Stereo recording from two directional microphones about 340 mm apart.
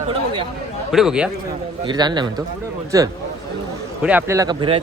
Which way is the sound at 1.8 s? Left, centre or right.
Centre.